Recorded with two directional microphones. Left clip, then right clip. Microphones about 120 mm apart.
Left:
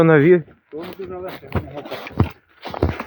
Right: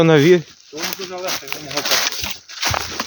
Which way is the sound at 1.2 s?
20° right (ahead or behind).